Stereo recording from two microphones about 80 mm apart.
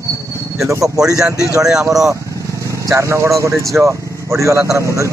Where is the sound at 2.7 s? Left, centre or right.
Right.